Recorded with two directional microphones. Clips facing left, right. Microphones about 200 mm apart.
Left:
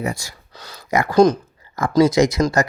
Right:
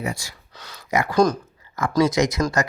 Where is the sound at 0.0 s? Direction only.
45° left (ahead or behind).